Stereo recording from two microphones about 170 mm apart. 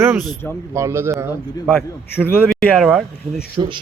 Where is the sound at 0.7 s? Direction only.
15° right (ahead or behind).